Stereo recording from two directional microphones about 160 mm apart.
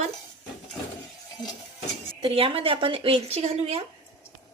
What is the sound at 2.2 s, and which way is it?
A woman's voice, 35° right (ahead or behind).